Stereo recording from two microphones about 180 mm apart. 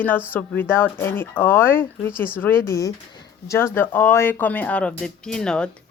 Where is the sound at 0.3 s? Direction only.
10° left (ahead or behind).